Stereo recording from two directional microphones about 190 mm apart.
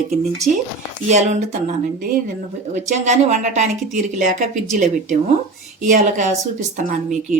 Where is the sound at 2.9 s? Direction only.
40° right (ahead or behind).